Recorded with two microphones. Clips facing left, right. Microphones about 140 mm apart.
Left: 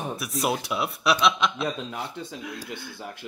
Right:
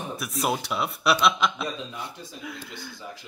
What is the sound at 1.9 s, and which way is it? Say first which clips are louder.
Speech: left 4 dB; 65° left (ahead or behind).